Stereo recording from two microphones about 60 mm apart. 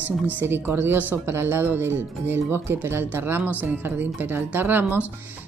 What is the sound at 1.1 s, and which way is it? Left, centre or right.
A woman's voice, right.